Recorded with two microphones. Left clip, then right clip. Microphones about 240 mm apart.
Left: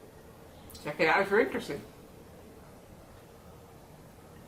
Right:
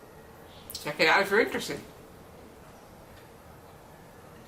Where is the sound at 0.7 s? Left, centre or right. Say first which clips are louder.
Right 3 dB; centre.